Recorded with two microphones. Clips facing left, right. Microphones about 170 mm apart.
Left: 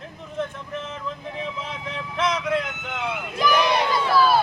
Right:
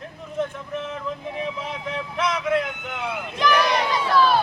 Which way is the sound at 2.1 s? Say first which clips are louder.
Even; centre (ahead or behind).